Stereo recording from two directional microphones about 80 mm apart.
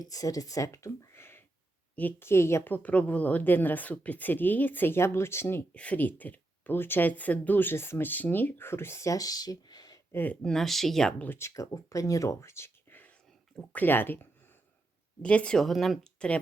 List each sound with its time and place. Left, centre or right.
0.0 s a woman's voice: left
2.6 s speech: left
5.7 s speech: centre; by 10.0 s left
10.1 s speech: left
10.4 s speech: centre
11.3 s speech: left
15.2 s speech: centre
16.2 s speech: centre